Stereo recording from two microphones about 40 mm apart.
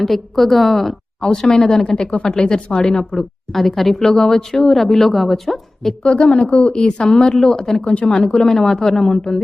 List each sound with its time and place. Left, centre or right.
0.0 s a woman's voice: centre
1.2 s a woman's voice: centre
3.5 s a woman's voice: centre
4.0 s a woman's voice: centre
6.0 s a woman's voice: left
6.7 s a woman's voice: centre
7.9 s a woman's voice: left
8.4 s a woman's voice: centre